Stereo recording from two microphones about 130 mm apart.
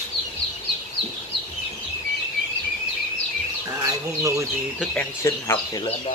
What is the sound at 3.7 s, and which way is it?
Bird, 25° right (ahead or behind).